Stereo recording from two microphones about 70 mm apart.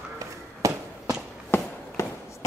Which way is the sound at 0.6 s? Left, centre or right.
Right.